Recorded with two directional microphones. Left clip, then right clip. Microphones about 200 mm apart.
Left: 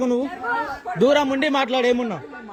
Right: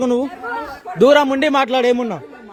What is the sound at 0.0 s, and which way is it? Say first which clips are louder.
A man's voice: right 4 dB; 55° right (ahead or behind).